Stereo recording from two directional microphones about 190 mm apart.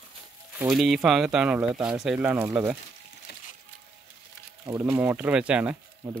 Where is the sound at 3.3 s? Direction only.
60° left (ahead or behind).